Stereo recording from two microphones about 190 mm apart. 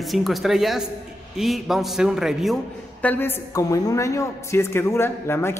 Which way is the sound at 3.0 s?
10° left (ahead or behind).